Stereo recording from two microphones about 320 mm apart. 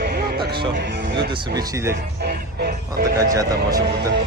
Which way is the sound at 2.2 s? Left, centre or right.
Right.